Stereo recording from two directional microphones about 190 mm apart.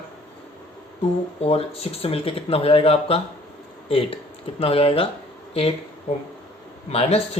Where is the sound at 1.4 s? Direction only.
30° left (ahead or behind).